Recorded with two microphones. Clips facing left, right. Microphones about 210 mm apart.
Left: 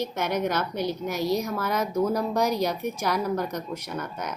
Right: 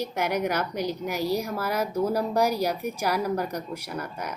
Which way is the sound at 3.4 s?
35° right (ahead or behind).